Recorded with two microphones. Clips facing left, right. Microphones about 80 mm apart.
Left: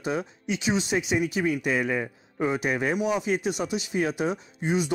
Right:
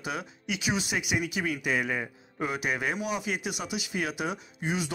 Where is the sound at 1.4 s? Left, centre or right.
Left.